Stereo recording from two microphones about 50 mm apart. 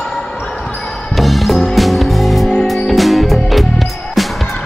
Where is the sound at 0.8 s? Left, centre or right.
Centre.